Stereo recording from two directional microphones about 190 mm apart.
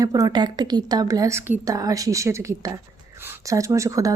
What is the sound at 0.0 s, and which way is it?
A woman's voice, 20° right (ahead or behind).